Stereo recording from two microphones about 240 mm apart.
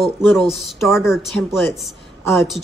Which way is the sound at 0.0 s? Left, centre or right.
Centre.